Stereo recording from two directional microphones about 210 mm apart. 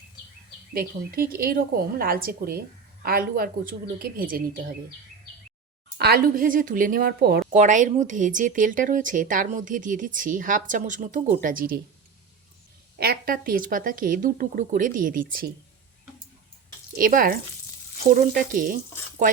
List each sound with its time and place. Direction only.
0.7 s a woman's voice: 45° right (ahead or behind)
6.0 s a woman's voice: 45° right (ahead or behind)
7.5 s speech: 35° right (ahead or behind)
13.0 s speech: 45° right (ahead or behind)
17.0 s speech: 40° right (ahead or behind)